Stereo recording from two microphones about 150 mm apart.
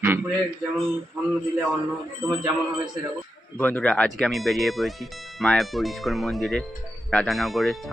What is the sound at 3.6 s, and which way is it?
Speech, 10° left (ahead or behind).